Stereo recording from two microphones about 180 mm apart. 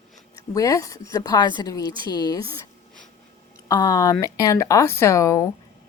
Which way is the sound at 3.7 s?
20° left (ahead or behind).